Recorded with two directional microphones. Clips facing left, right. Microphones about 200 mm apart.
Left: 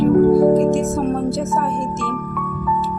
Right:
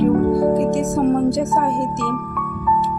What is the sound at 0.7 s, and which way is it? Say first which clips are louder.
Speech: right 2 dB; 15° right (ahead or behind).